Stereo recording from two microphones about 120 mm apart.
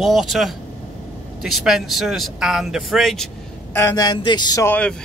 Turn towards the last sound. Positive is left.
turn(degrees=10)  # may be behind; listen again after turning